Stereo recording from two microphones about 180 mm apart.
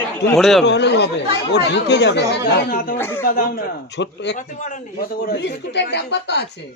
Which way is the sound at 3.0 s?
15° left (ahead or behind).